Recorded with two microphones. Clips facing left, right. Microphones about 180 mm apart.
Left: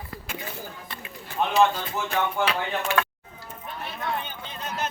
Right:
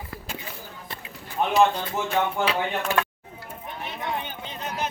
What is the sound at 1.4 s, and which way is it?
Speech, 15° right (ahead or behind).